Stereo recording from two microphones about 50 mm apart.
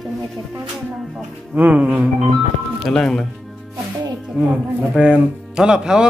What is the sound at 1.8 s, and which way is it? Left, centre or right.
Speech, right.